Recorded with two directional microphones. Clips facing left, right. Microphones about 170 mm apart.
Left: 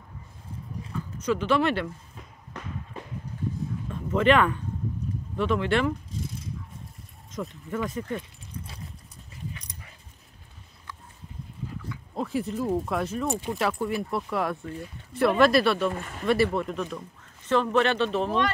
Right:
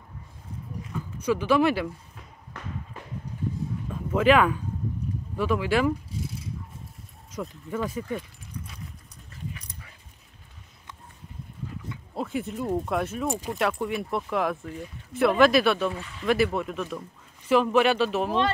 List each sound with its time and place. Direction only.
1.2 s speech: 10° right (ahead or behind)
3.9 s a sound: 5° right (ahead or behind)
5.4 s speech: 5° right (ahead or behind)
7.3 s speech: 10° right (ahead or behind)
12.2 s speech: centre (ahead or behind)
15.9 s speech: 50° left (ahead or behind)
16.3 s speech: centre (ahead or behind)